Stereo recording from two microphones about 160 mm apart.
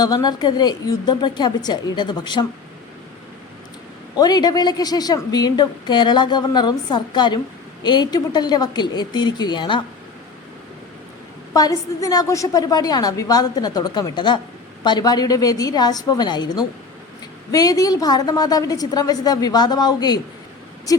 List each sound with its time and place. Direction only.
0.0 s a woman's voice: 25° left (ahead or behind)
4.2 s a woman's voice: 25° left (ahead or behind)
11.5 s a woman's voice: 20° left (ahead or behind)